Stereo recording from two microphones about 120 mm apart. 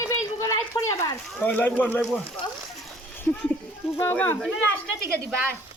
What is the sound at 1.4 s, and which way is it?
Speech, 15° left (ahead or behind).